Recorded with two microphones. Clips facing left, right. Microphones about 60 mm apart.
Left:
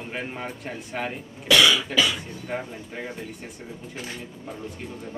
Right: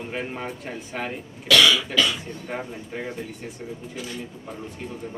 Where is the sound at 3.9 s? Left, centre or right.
Left.